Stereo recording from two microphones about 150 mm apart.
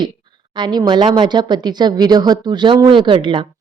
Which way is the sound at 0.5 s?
30° right (ahead or behind).